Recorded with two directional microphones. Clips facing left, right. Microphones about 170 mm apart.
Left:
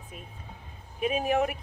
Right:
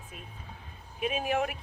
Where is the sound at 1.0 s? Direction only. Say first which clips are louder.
Left 4 dB; 35° left (ahead or behind).